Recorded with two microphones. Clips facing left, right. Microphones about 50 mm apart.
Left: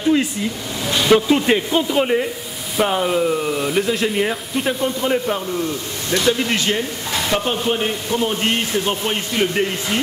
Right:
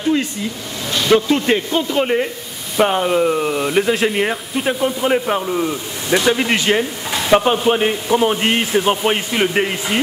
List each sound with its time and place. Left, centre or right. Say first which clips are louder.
0.8 s speech: even; centre
2.8 s a man's voice: right 3 dB; centre
4.1 s a man's voice: right 1 dB; centre
6.6 s a sound: right 4 dB; centre
7.3 s a man's voice: right 7 dB; centre